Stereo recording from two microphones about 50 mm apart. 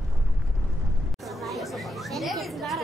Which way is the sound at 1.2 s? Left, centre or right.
Centre.